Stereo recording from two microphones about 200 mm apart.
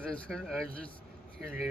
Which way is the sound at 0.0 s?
5° left (ahead or behind).